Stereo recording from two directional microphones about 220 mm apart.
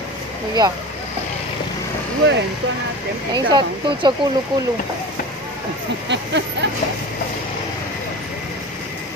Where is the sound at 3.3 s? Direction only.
20° right (ahead or behind).